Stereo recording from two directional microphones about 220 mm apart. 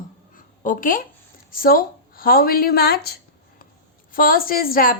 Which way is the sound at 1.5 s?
40° left (ahead or behind).